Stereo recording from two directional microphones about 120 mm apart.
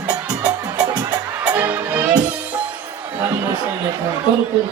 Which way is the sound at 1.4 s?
15° right (ahead or behind).